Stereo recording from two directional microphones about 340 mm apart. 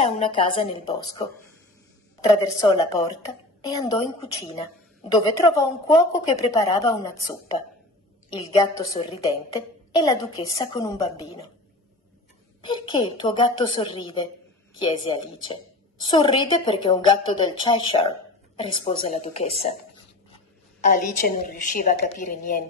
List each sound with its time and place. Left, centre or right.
0.0 s a woman's voice: centre
2.2 s a woman's voice: centre
12.6 s a woman's voice: centre
20.8 s a woman's voice: left